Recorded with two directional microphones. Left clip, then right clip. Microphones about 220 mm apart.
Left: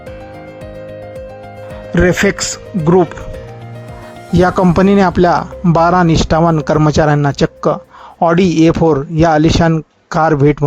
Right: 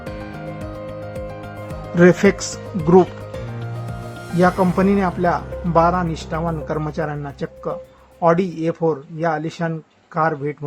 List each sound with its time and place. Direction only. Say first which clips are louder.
2.0 s speech: left 2 dB; 25° left (ahead or behind)
4.4 s speech: left 6 dB; 40° left (ahead or behind)